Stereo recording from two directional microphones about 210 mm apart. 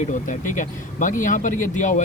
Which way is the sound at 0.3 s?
35° left (ahead or behind).